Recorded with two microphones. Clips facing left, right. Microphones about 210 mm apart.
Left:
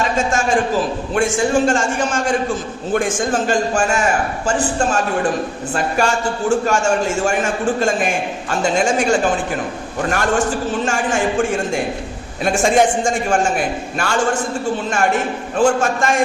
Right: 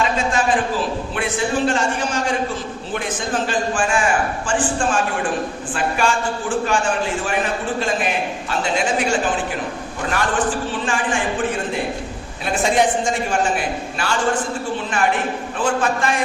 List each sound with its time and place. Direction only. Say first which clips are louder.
0.0 s a man's voice: left 1 dB; 45° left (ahead or behind)
10.1 s a man's voice: left 2 dB; 45° left (ahead or behind)
15.5 s a man's voice: left 6 dB; 45° left (ahead or behind)